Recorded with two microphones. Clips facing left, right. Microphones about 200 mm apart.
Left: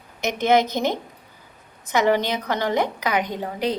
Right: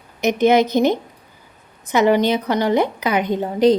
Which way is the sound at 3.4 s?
35° right (ahead or behind).